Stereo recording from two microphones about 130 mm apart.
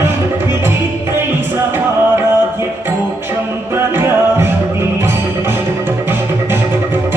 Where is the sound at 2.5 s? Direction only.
15° right (ahead or behind).